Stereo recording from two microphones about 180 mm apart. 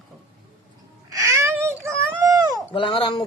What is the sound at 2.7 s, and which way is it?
Speech, 30° left (ahead or behind).